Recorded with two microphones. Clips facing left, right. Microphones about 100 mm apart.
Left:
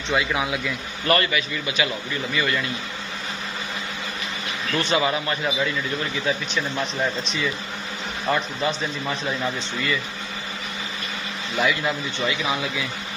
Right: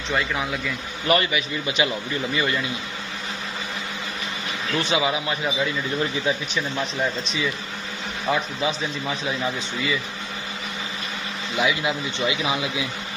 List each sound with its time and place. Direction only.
0.1 s a man's voice: 5° left (ahead or behind)
1.0 s a man's voice: 15° right (ahead or behind)
4.7 s a man's voice: 5° right (ahead or behind)
11.5 s a man's voice: 5° right (ahead or behind)